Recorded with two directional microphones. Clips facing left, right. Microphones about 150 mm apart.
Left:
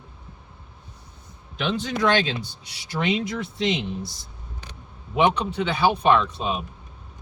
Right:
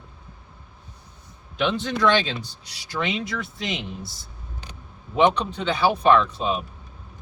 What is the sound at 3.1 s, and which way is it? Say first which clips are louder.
Speech: left 3 dB; 20° left (ahead or behind).